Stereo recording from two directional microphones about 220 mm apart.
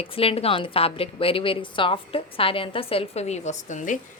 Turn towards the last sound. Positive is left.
turn(degrees=35)  # may be behind; listen again after turning